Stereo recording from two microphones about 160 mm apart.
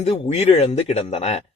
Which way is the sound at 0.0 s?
40° left (ahead or behind).